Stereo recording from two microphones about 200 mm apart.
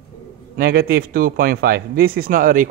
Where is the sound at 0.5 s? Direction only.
50° right (ahead or behind).